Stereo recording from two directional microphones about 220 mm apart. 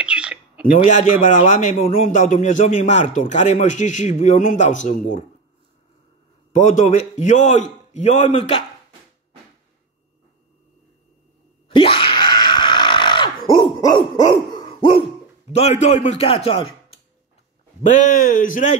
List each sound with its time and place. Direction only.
0.0 s bird: 5° right (ahead or behind)
1.5 s speech: 35° left (ahead or behind)
6.5 s speech: 35° left (ahead or behind)
11.7 s screaming: 25° left (ahead or behind)
13.6 s dog: 20° left (ahead or behind)
15.5 s a man's voice: 30° left (ahead or behind)